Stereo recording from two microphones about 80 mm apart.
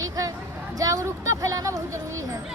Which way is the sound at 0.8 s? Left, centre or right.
Right.